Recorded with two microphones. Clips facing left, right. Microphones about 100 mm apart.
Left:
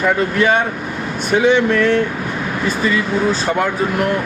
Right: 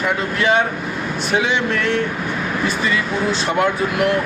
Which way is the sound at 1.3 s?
50° left (ahead or behind).